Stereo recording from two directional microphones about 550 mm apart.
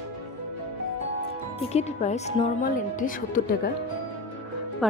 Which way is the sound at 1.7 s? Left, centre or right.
Centre.